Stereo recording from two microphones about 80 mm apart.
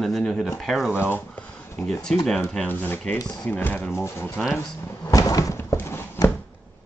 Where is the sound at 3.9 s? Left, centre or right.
Left.